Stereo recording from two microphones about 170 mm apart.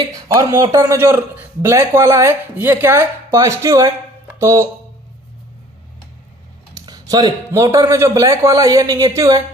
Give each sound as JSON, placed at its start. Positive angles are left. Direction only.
{"t": 0.3, "sound": "a man's voice", "side_deg": -20}
{"t": 6.7, "sound": "speech", "side_deg": -20}